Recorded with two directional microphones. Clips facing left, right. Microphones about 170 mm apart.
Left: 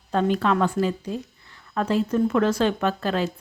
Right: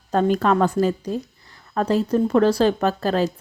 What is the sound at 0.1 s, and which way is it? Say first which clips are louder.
A woman's voice: right 3 dB; 40° right (ahead or behind).